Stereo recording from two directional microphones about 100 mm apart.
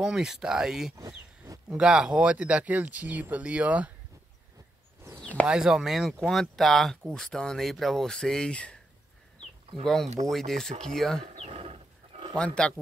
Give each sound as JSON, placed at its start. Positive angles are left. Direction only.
{"t": 0.0, "sound": "speech", "side_deg": -5}
{"t": 0.9, "sound": "a sound", "side_deg": -35}
{"t": 1.7, "sound": "speech", "side_deg": -5}
{"t": 5.2, "sound": "a sound", "side_deg": 15}
{"t": 5.5, "sound": "speech", "side_deg": -5}
{"t": 9.8, "sound": "speech", "side_deg": 5}
{"t": 11.3, "sound": "wild animals", "side_deg": -85}
{"t": 12.4, "sound": "speech", "side_deg": 10}